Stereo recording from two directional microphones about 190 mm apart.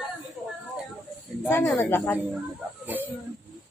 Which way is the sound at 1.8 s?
10° left (ahead or behind).